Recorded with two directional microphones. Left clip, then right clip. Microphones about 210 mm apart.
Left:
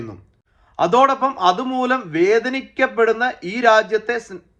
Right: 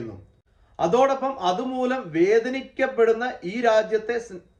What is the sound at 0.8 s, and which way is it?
Speech, 5° left (ahead or behind).